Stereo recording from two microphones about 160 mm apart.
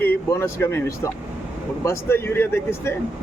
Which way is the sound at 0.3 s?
15° left (ahead or behind).